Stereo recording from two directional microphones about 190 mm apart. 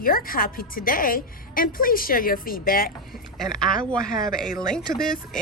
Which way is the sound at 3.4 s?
5° left (ahead or behind).